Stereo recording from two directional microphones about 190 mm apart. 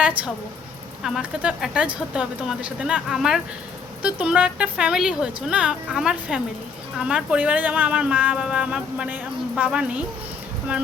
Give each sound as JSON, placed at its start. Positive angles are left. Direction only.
{"t": 0.0, "sound": "speech", "side_deg": -5}